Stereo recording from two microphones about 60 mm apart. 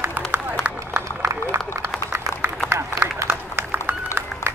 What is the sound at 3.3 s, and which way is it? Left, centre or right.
Run, right.